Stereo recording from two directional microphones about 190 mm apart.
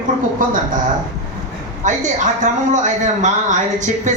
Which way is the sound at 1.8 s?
40° right (ahead or behind).